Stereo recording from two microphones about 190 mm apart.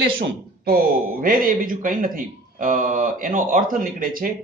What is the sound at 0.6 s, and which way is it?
Speech, 50° right (ahead or behind).